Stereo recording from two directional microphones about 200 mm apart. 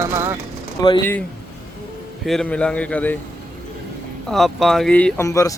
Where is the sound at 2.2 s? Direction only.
5° left (ahead or behind).